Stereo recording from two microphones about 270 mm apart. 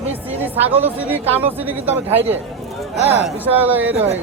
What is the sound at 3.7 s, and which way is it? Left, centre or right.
Speech, centre.